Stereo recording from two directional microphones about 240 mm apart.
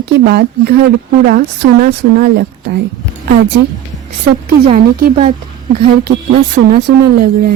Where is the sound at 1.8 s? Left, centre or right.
Right.